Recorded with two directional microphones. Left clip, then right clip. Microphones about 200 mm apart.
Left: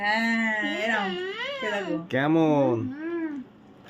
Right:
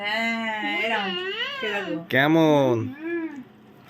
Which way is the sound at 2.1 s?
5° right (ahead or behind).